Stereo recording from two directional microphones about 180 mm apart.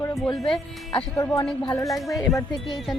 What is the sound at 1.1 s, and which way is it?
Speech, 20° left (ahead or behind).